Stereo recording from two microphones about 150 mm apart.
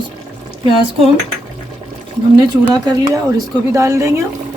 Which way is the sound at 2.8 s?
25° right (ahead or behind).